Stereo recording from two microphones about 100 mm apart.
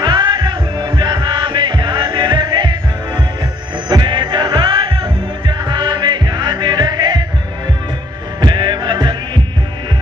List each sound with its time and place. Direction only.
0.0 s music: 45° right (ahead or behind)
3.9 s music: 45° right (ahead or behind)
8.4 s music: 50° right (ahead or behind)